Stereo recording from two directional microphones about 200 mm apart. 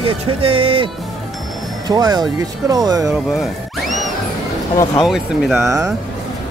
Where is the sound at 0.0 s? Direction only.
25° right (ahead or behind).